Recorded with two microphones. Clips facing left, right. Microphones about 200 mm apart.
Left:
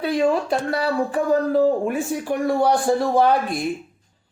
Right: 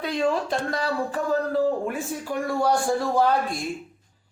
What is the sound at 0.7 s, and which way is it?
A woman's voice, 10° left (ahead or behind).